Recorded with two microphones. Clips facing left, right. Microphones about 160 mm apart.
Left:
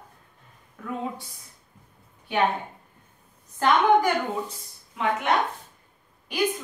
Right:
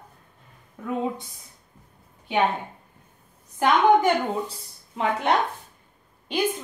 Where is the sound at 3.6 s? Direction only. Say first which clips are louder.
Right 1 dB; 25° right (ahead or behind).